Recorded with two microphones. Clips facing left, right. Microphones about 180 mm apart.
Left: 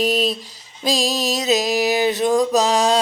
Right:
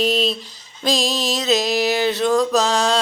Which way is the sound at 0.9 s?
35° left (ahead or behind).